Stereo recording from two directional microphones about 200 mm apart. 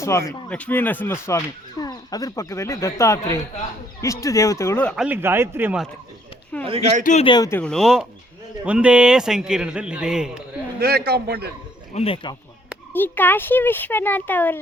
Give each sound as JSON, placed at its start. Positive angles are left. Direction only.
{"t": 0.0, "sound": "speech", "side_deg": 15}
{"t": 4.9, "sound": "speech", "side_deg": -10}
{"t": 6.7, "sound": "speech", "side_deg": -30}
{"t": 7.0, "sound": "speech", "side_deg": 35}
{"t": 7.3, "sound": "speech", "side_deg": 20}
{"t": 7.6, "sound": "a man's voice", "side_deg": 5}
{"t": 10.8, "sound": "speech", "side_deg": -50}
{"t": 11.9, "sound": "speech", "side_deg": 25}
{"t": 12.9, "sound": "speech", "side_deg": 10}